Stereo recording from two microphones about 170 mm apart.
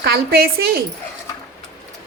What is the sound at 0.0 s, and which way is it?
Speech, 65° right (ahead or behind).